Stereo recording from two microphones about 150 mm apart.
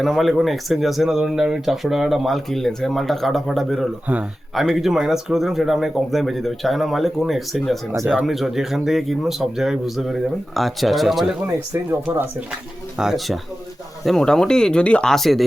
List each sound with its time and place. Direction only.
0.0 s speech: centre (ahead or behind)
7.9 s speech: 15° right (ahead or behind)
8.2 s speech: centre (ahead or behind)
11.7 s speech: 15° right (ahead or behind)
13.0 s speech: centre (ahead or behind)